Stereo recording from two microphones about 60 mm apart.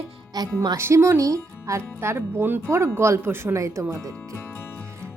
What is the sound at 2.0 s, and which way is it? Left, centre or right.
Speech, right.